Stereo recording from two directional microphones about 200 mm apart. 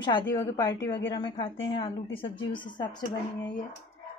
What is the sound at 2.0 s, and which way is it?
Speech, 70° left (ahead or behind).